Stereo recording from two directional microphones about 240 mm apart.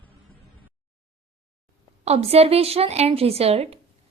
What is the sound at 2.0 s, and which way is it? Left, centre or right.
A woman's voice, right.